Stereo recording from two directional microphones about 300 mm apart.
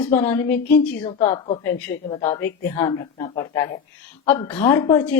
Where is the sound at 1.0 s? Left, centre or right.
Centre.